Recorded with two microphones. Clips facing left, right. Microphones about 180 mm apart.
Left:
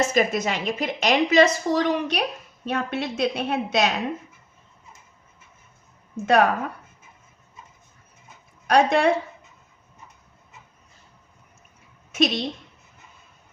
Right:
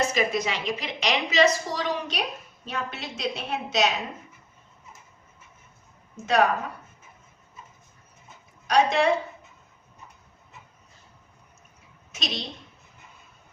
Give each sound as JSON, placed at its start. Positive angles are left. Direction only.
{"t": 0.0, "sound": "a woman's voice", "side_deg": 50}
{"t": 6.2, "sound": "a woman's voice", "side_deg": 55}
{"t": 8.6, "sound": "a woman's voice", "side_deg": 55}
{"t": 12.1, "sound": "a woman's voice", "side_deg": 55}